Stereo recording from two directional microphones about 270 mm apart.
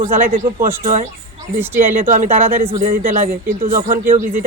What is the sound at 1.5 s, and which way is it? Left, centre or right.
Speech, centre.